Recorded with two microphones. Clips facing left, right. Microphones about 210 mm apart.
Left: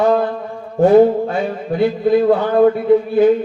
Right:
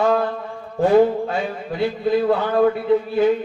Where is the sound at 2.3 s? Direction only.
40° left (ahead or behind).